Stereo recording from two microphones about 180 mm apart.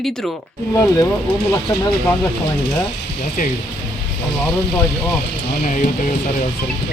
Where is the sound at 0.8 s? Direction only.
20° left (ahead or behind).